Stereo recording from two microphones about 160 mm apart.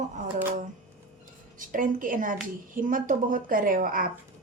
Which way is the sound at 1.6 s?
55° right (ahead or behind).